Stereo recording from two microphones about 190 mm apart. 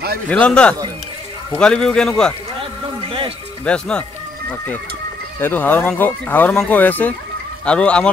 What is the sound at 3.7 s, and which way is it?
Speech, 5° left (ahead or behind).